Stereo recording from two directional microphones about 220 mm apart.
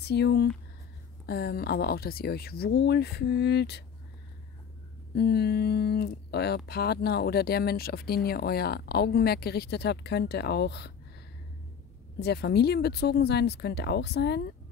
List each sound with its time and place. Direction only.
0.0 s speech: 50° left (ahead or behind)
5.1 s speech: 45° left (ahead or behind)
12.2 s speech: 50° left (ahead or behind)